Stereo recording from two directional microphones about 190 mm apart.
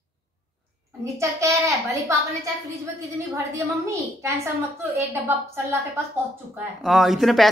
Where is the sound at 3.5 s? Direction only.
15° right (ahead or behind).